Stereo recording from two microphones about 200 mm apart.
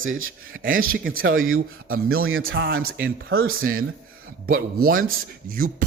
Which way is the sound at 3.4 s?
45° right (ahead or behind).